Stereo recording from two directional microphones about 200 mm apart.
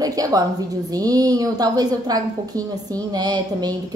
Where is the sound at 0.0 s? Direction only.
15° right (ahead or behind).